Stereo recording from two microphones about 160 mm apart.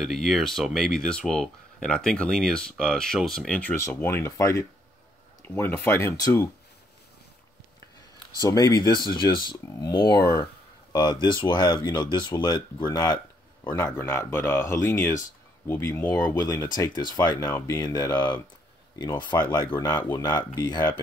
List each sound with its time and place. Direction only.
0.0 s speech: centre (ahead or behind); by 6.5 s 15° left (ahead or behind)
8.4 s speech: 20° left (ahead or behind)
17.7 s speech: 25° left (ahead or behind)